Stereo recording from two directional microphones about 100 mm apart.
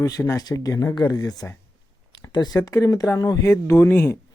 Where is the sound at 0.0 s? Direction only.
35° left (ahead or behind).